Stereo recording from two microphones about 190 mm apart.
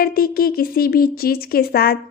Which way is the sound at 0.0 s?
50° left (ahead or behind).